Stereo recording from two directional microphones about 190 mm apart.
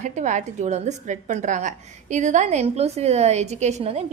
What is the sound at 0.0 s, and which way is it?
A woman's voice, 40° right (ahead or behind).